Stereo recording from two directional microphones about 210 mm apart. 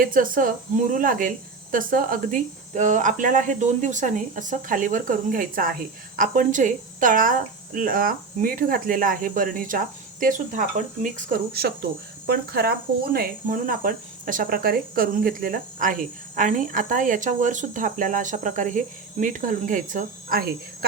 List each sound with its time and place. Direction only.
0.0 s speech: 40° right (ahead or behind)